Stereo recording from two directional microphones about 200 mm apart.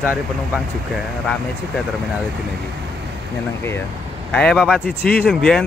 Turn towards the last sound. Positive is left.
turn(degrees=5)  # may be behind; listen again after turning